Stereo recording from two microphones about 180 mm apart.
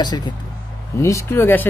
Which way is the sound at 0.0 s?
25° left (ahead or behind).